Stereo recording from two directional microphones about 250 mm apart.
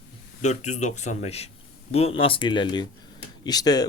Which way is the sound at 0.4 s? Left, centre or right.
Left.